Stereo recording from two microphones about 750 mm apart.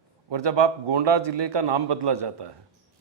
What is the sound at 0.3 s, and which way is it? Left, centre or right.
A man's voice, right.